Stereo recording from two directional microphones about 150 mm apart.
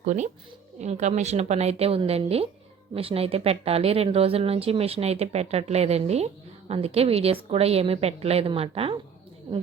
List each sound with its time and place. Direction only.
0.0 s a woman's voice: 50° right (ahead or behind)